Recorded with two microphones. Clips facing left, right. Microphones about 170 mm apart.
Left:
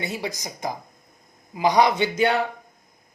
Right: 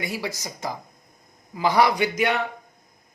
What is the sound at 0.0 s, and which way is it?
Speech, 20° left (ahead or behind).